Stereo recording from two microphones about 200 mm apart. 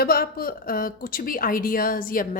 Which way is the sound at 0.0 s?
50° left (ahead or behind).